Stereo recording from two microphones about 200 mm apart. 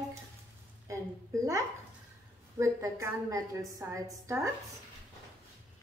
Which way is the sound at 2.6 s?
15° right (ahead or behind).